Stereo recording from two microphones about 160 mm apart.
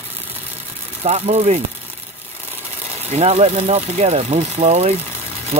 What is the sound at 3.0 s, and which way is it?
Speech, 45° right (ahead or behind).